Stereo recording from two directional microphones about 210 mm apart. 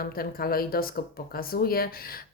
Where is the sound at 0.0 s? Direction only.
45° left (ahead or behind).